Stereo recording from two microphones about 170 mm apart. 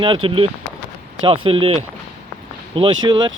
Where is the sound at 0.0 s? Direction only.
30° right (ahead or behind).